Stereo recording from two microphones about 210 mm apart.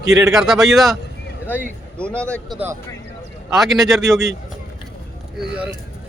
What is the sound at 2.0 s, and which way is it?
Speech, 5° left (ahead or behind).